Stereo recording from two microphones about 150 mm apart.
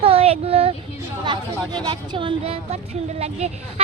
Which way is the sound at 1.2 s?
30° right (ahead or behind).